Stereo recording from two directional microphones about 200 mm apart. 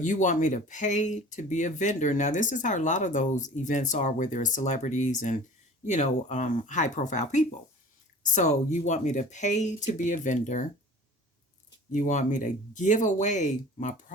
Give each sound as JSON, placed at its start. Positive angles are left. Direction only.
{"t": 0.0, "sound": "speech", "side_deg": 40}
{"t": 11.9, "sound": "speech", "side_deg": 40}